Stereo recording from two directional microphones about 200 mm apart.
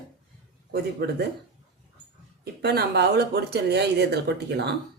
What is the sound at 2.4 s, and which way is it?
Speech, 50° right (ahead or behind).